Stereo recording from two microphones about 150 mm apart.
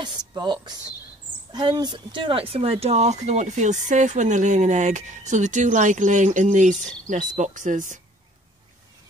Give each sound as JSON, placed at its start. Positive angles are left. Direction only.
{"t": 0.0, "sound": "speech", "side_deg": -30}